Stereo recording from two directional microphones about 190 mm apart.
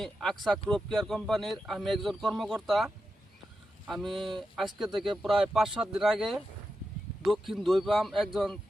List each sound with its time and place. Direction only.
0.0 s speech: 5° left (ahead or behind)